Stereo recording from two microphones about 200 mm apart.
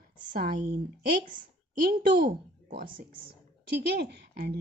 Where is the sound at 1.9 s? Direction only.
50° right (ahead or behind).